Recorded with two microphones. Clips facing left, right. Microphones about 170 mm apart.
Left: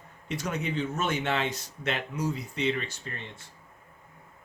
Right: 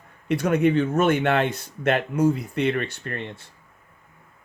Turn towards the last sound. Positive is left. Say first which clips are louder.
# right 8 dB
turn(degrees=-65)  # may be behind; listen again after turning